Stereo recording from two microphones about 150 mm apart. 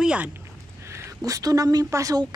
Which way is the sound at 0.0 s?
10° right (ahead or behind).